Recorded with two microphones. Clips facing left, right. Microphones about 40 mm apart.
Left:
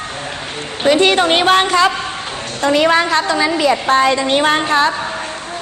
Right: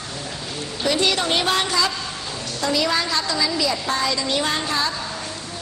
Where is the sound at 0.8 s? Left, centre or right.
Left.